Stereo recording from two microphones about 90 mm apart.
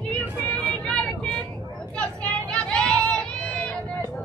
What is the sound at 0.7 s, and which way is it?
Vehicle, 10° left (ahead or behind).